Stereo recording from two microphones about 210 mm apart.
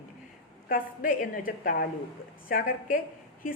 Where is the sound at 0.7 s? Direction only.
40° left (ahead or behind).